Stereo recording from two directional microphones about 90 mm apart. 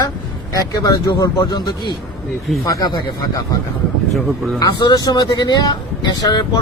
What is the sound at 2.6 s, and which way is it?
Speech, 40° left (ahead or behind).